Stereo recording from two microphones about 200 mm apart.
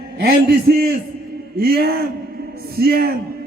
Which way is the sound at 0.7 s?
55° right (ahead or behind).